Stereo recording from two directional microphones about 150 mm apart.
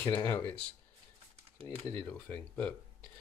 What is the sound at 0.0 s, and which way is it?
Speech, 15° left (ahead or behind).